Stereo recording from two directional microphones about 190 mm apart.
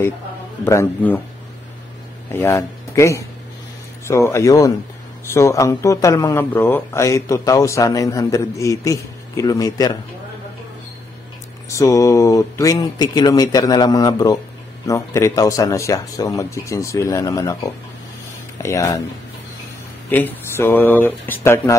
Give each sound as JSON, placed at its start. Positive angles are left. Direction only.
{"t": 0.7, "sound": "speech", "side_deg": 15}
{"t": 2.3, "sound": "speech", "side_deg": 15}
{"t": 11.7, "sound": "speech", "side_deg": 15}
{"t": 20.1, "sound": "speech", "side_deg": 10}